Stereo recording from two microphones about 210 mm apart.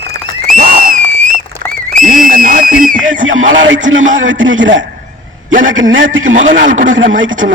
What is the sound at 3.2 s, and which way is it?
A man's voice, 70° right (ahead or behind).